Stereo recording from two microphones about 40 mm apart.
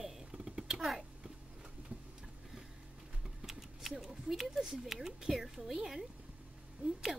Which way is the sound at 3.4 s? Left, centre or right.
Centre.